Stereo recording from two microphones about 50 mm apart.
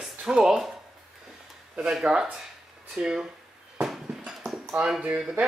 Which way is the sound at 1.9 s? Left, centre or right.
Centre.